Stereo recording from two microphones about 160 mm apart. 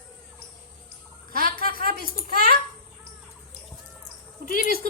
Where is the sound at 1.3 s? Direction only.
65° right (ahead or behind).